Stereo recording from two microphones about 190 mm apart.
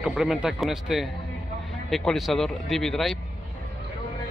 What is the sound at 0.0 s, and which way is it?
Speech, centre (ahead or behind).